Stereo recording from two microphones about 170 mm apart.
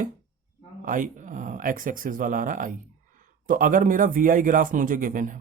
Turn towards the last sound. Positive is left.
turn(degrees=-50)  # may be behind; listen again after turning